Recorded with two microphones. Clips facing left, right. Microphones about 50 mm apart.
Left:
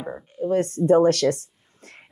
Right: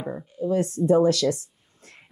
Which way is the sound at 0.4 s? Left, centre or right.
Left.